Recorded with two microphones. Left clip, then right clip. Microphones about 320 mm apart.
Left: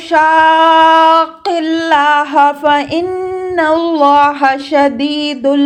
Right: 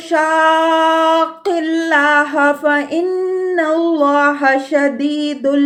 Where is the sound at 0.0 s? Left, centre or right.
Centre.